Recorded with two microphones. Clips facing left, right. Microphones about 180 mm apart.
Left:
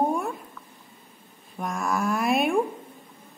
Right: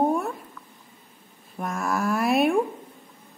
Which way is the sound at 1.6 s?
Centre (ahead or behind).